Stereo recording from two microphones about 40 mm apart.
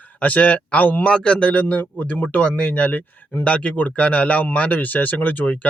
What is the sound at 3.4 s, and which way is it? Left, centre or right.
A man's voice, left.